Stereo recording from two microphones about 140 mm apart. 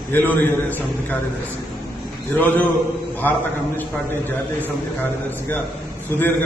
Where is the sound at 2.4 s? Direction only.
15° left (ahead or behind).